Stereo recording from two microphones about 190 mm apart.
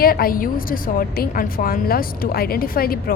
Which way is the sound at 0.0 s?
50° left (ahead or behind).